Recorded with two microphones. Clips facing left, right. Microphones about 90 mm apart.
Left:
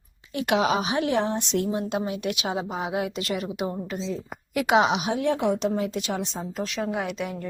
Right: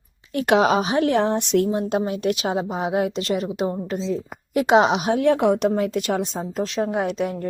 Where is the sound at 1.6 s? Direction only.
35° right (ahead or behind).